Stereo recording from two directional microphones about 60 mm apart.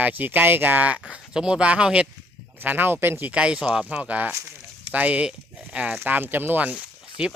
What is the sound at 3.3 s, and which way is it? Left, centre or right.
A man's voice, centre.